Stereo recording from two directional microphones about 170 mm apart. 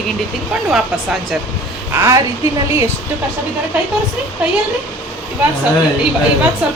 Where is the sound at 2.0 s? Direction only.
20° right (ahead or behind).